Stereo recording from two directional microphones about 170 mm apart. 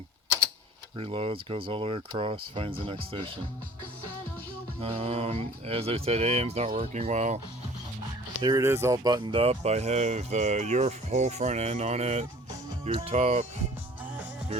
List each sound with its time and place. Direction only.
0.9 s speech: 35° right (ahead or behind)
4.8 s speech: 35° right (ahead or behind)
6.7 s speech: 55° right (ahead or behind)
7.0 s speech: 45° right (ahead or behind)
8.4 s speech: 25° right (ahead or behind)
8.6 s speech: 15° right (ahead or behind); by 13.5 s 40° right (ahead or behind)